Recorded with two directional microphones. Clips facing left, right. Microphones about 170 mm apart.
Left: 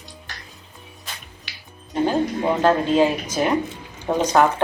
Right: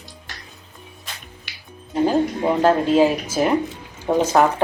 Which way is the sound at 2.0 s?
5° right (ahead or behind).